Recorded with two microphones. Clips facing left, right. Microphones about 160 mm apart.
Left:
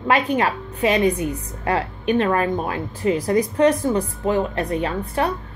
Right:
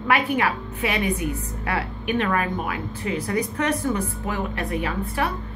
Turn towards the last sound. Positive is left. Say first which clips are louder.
# left 3 dB
turn(degrees=35)  # may be behind; listen again after turning